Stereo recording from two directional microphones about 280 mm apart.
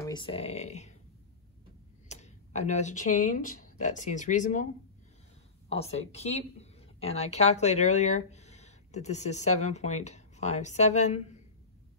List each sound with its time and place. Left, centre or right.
0.0 s speech: centre
2.0 s speech: left
5.7 s a woman's voice: left